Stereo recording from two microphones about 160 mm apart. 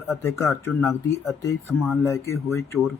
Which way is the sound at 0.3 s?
15° left (ahead or behind).